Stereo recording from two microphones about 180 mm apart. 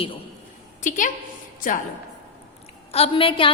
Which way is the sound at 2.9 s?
30° left (ahead or behind).